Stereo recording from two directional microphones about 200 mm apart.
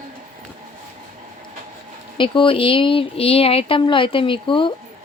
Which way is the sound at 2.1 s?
25° left (ahead or behind).